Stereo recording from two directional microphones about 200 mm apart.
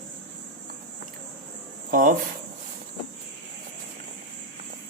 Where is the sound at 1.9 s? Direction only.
40° right (ahead or behind).